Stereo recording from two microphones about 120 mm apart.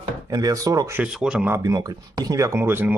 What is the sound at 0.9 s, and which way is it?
Speech, 5° right (ahead or behind).